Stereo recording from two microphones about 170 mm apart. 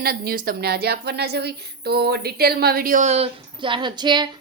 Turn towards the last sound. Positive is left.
turn(degrees=-25)  # may be behind; listen again after turning